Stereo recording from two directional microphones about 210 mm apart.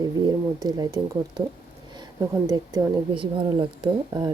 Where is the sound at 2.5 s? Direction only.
20° right (ahead or behind).